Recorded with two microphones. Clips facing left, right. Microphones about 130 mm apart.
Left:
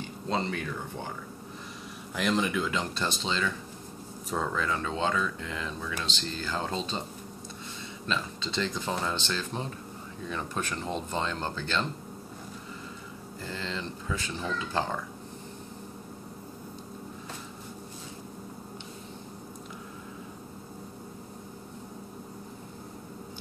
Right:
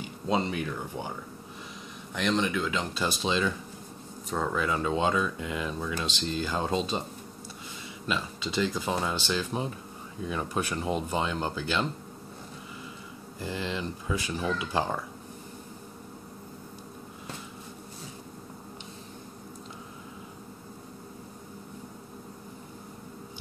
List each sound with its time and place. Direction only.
0.3 s speech: 15° right (ahead or behind)
2.1 s speech: 5° left (ahead or behind); by 3.5 s 15° right (ahead or behind)
4.3 s speech: 5° right (ahead or behind)
8.1 s speech: 10° right (ahead or behind)
13.4 s speech: 15° right (ahead or behind)